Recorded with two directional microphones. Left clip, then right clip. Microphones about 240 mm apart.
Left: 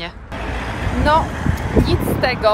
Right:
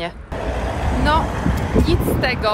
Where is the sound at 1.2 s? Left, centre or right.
Right.